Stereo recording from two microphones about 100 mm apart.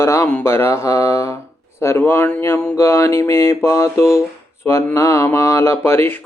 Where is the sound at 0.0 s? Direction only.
30° left (ahead or behind).